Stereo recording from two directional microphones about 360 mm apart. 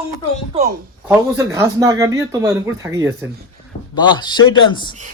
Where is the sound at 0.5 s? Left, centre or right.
Centre.